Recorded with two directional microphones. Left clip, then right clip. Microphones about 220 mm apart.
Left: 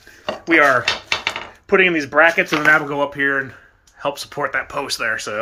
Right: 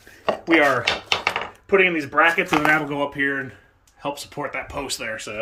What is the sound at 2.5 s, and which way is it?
Speech, 5° right (ahead or behind).